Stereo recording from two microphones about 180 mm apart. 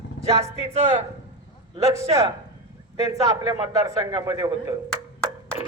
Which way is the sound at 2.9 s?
20° right (ahead or behind).